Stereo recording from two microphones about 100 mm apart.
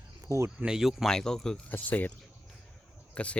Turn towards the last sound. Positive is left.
turn(degrees=10)  # may be behind; listen again after turning